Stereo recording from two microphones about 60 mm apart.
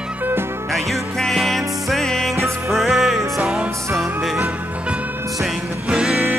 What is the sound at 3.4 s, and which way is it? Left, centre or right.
Music, centre.